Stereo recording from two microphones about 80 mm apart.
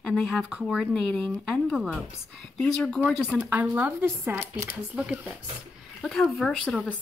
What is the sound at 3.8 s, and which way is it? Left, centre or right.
Speech, right.